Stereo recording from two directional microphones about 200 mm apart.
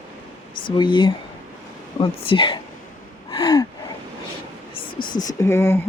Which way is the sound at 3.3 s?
20° left (ahead or behind).